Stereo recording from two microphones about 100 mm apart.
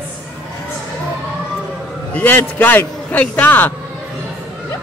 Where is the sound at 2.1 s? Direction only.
15° left (ahead or behind).